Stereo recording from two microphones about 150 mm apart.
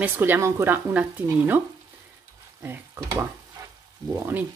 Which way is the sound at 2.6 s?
15° right (ahead or behind).